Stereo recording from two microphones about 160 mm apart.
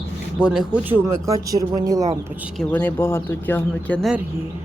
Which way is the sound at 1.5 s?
20° right (ahead or behind).